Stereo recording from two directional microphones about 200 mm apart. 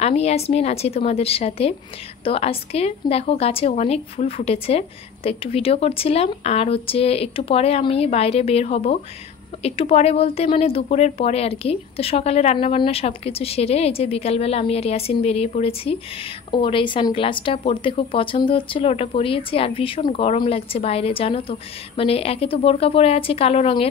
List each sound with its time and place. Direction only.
0.0 s a woman's voice: 30° left (ahead or behind)